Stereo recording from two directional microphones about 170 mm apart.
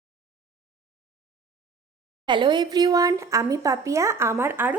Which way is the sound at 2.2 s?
25° right (ahead or behind).